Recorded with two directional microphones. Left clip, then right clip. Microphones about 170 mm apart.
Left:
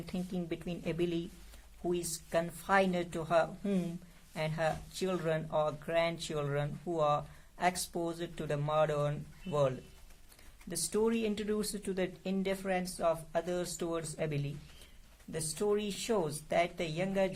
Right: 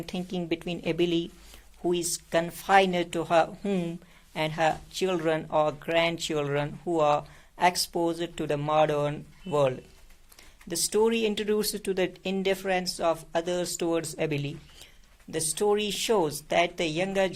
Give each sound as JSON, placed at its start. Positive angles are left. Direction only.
{"t": 0.0, "sound": "a woman's voice", "side_deg": -30}